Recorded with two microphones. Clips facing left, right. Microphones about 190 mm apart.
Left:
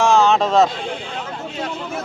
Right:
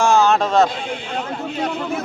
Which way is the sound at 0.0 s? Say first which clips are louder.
Even; centre (ahead or behind).